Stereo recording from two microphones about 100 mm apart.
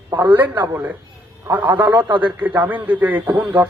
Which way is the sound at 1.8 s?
55° right (ahead or behind).